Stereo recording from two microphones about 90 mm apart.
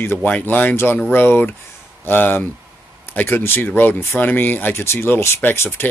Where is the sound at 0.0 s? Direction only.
20° left (ahead or behind).